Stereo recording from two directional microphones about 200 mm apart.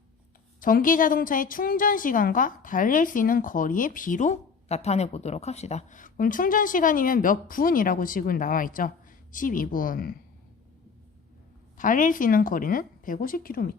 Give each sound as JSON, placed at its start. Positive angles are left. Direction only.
{"t": 0.6, "sound": "a woman's voice", "side_deg": 45}
{"t": 11.8, "sound": "a woman's voice", "side_deg": 40}